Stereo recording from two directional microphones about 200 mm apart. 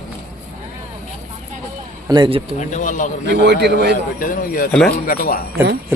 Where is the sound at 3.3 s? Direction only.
55° right (ahead or behind).